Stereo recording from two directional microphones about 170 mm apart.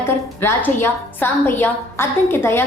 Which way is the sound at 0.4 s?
15° left (ahead or behind).